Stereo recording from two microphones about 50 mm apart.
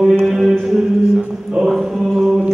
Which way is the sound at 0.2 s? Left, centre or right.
Centre.